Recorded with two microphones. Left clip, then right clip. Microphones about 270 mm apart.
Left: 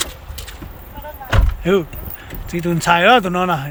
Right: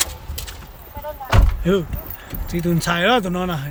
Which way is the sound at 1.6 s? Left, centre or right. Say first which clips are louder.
Left 3 dB; centre.